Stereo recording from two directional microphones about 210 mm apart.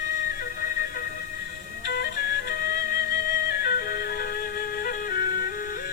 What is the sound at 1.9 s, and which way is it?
Music, 45° left (ahead or behind).